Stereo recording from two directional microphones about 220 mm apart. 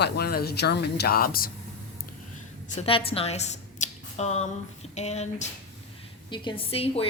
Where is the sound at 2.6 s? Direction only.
25° left (ahead or behind).